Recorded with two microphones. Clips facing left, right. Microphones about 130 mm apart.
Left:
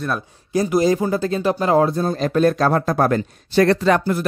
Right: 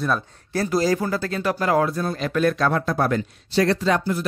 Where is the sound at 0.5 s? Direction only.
15° left (ahead or behind).